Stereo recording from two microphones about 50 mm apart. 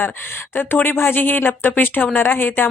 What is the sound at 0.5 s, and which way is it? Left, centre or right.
Speech, left.